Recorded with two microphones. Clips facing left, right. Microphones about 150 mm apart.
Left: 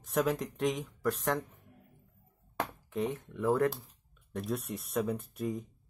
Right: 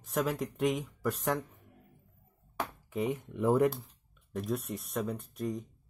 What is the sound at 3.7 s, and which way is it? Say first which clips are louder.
Speech: right 3 dB; centre (ahead or behind).